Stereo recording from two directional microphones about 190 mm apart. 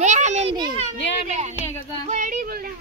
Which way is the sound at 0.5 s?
25° right (ahead or behind).